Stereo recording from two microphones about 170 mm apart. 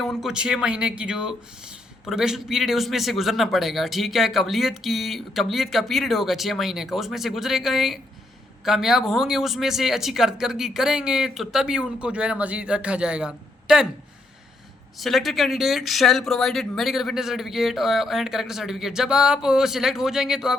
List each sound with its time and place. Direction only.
0.0 s a man's voice: centre (ahead or behind)
14.9 s a man's voice: centre (ahead or behind)